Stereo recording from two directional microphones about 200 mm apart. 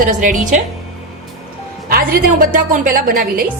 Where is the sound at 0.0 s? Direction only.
40° right (ahead or behind).